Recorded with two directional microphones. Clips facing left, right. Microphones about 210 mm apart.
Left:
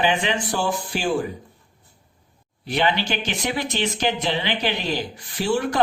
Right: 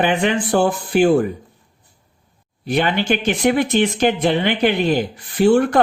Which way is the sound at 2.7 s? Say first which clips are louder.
Right 5 dB; 50° right (ahead or behind).